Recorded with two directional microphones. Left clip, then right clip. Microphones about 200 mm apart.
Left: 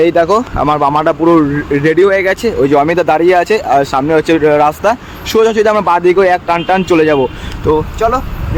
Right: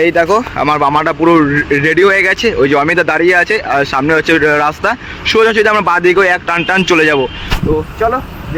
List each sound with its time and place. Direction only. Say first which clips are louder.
0.0 s speech: left 1 dB; 15° left (ahead or behind)
0.8 s a man's voice: left 1 dB; 10° left (ahead or behind)